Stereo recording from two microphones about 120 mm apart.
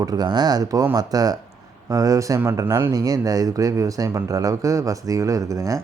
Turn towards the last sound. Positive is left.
turn(degrees=-30)  # may be behind; listen again after turning